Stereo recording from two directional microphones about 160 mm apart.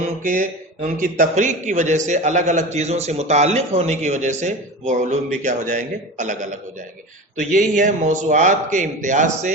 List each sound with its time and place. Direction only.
0.0 s a man's voice: 55° right (ahead or behind)